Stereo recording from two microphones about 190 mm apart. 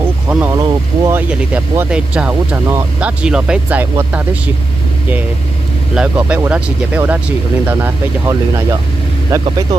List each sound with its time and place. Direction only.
0.3 s a sound: 10° right (ahead or behind)
0.6 s speech: 20° right (ahead or behind)
1.3 s speech: 5° right (ahead or behind)
5.9 s speech: 5° right (ahead or behind)